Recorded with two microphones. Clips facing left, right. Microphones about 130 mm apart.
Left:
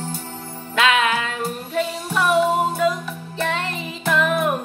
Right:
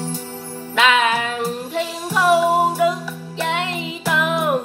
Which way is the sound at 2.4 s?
15° right (ahead or behind).